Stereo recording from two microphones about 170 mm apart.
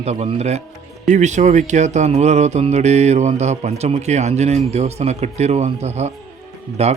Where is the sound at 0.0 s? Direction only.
40° right (ahead or behind).